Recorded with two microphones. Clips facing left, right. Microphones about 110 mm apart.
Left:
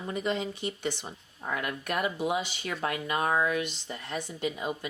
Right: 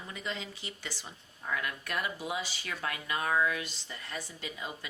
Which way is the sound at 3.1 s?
30° left (ahead or behind).